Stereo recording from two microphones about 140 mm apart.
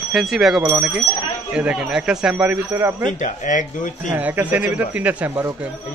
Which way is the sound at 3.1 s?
65° left (ahead or behind).